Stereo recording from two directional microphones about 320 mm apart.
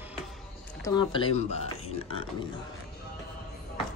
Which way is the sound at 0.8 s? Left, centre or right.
Centre.